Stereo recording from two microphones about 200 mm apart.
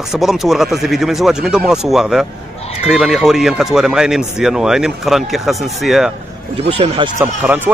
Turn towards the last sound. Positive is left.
turn(degrees=-10)  # may be behind; listen again after turning